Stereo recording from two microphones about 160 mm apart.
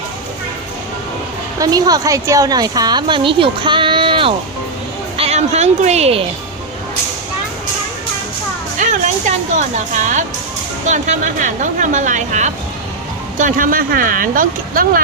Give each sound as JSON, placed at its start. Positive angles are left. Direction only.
{"t": 1.5, "sound": "a woman's voice", "side_deg": -25}
{"t": 8.8, "sound": "speech", "side_deg": -50}
{"t": 13.4, "sound": "speech", "side_deg": -60}